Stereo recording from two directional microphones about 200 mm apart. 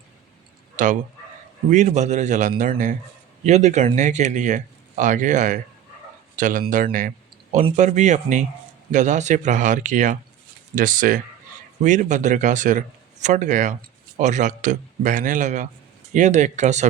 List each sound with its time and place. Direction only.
0.8 s speech: 40° right (ahead or behind)